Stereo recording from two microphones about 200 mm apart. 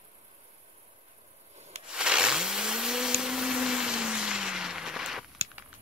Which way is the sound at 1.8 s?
5° right (ahead or behind).